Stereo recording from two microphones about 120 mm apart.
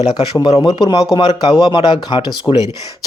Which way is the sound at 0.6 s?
35° left (ahead or behind).